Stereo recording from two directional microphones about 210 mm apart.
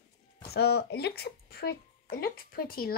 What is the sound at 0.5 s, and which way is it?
Speech, 50° left (ahead or behind).